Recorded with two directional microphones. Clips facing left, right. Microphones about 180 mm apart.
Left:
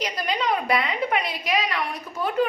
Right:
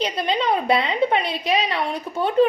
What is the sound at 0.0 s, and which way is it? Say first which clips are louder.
A child's voice: right 4 dB; 25° right (ahead or behind).